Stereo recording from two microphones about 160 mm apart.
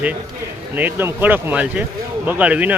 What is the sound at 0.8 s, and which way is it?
Speech, 15° right (ahead or behind).